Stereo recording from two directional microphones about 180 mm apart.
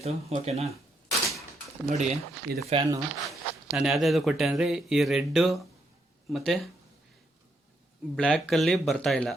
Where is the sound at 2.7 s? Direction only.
25° right (ahead or behind).